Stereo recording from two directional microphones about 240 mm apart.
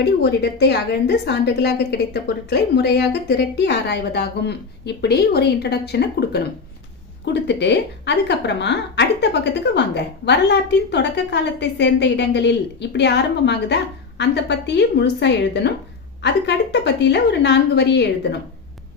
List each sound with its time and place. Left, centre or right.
0.0 s a woman's voice: left
7.4 s a woman's voice: left